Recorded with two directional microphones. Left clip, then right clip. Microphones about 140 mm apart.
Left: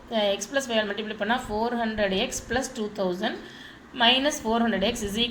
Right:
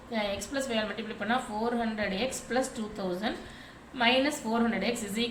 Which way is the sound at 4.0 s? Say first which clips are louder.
Left 5 dB; 25° left (ahead or behind).